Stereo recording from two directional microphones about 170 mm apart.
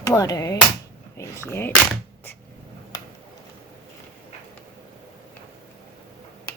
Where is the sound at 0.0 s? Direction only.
20° left (ahead or behind).